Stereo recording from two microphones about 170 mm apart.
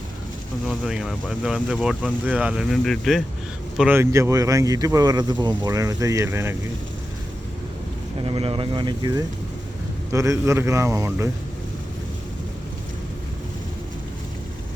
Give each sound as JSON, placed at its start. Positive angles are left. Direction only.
{"t": 0.7, "sound": "speech", "side_deg": -5}
{"t": 3.8, "sound": "speech", "side_deg": -10}
{"t": 8.2, "sound": "a man's voice", "side_deg": -30}